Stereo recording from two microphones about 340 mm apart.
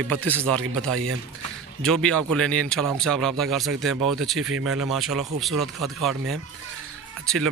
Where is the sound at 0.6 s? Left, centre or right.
Right.